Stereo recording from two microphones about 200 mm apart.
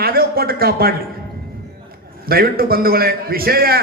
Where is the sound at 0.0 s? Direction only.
50° right (ahead or behind).